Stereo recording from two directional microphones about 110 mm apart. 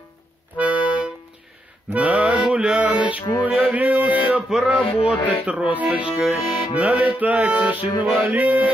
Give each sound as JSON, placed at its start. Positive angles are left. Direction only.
{"t": 0.6, "sound": "accordion", "side_deg": -10}
{"t": 1.9, "sound": "music", "side_deg": -10}
{"t": 4.8, "sound": "speech", "side_deg": 55}
{"t": 5.4, "sound": "accordion", "side_deg": -15}